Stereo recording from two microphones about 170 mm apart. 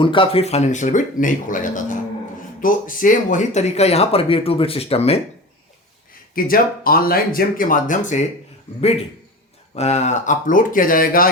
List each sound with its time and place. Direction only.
0.0 s speech: 30° left (ahead or behind)
6.3 s speech: 60° left (ahead or behind)
9.7 s speech: 40° left (ahead or behind); by 11.3 s 55° left (ahead or behind)